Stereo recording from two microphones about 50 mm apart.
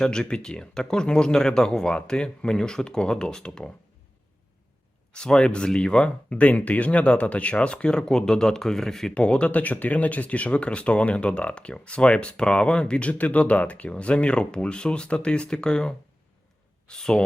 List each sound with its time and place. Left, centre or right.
0.0 s speech: centre
5.1 s speech: centre
9.1 s speech: left